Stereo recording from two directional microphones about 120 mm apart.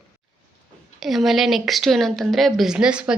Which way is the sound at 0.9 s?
Centre (ahead or behind).